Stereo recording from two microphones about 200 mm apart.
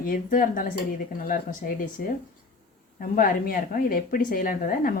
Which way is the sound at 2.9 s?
45° left (ahead or behind).